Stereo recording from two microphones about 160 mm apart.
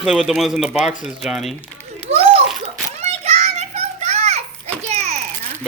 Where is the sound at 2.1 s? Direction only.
40° right (ahead or behind).